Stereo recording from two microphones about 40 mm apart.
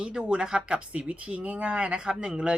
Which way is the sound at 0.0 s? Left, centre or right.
Right.